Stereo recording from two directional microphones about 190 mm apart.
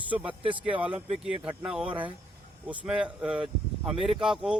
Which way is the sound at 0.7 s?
10° right (ahead or behind).